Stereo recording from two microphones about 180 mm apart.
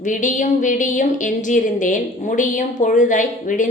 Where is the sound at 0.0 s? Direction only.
45° left (ahead or behind).